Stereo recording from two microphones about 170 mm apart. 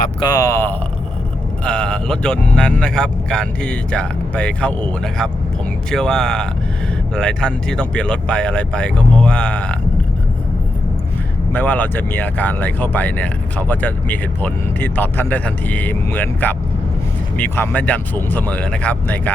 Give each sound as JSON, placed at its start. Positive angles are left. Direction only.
{"t": 0.2, "sound": "speech", "side_deg": 20}
{"t": 11.5, "sound": "speech", "side_deg": 10}